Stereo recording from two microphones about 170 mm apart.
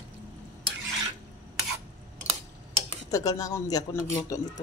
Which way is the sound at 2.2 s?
40° right (ahead or behind).